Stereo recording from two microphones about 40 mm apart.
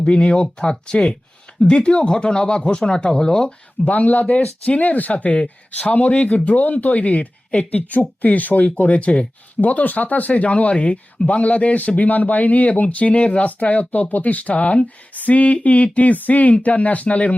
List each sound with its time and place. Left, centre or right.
0.0 s speech: left
3.8 s speech: left